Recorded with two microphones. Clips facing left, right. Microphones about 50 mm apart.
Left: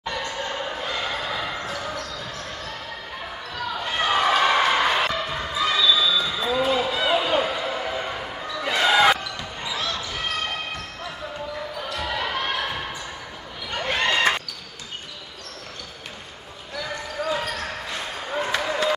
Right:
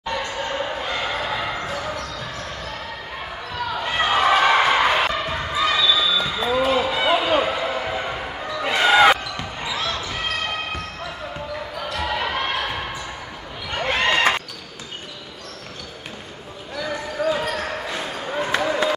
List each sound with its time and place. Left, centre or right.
0.1 s basketball bounce: centre
3.5 s basketball bounce: centre
11.9 s basketball bounce: centre
13.7 s a sound: right
16.8 s basketball bounce: centre